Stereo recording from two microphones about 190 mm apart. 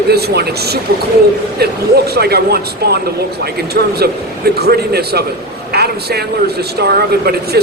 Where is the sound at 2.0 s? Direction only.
55° right (ahead or behind).